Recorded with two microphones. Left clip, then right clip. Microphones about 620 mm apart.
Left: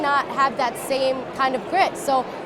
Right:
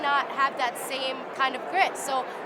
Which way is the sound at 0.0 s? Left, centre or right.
Left.